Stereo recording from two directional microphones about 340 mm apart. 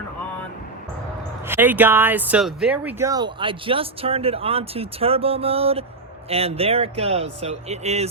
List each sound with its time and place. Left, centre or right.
1.5 s speech: centre